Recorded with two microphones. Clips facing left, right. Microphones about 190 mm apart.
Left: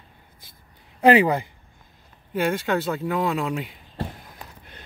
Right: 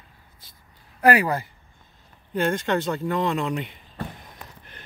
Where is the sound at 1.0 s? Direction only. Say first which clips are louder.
Left 3 dB; 20° left (ahead or behind).